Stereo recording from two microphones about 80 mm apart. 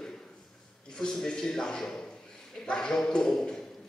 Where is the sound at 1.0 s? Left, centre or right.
Centre.